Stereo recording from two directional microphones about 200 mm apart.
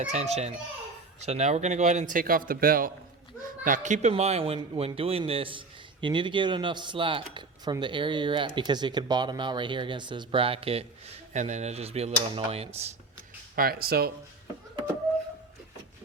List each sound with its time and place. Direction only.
0.1 s a man's voice: 35° right (ahead or behind)
13.6 s speech: 50° right (ahead or behind)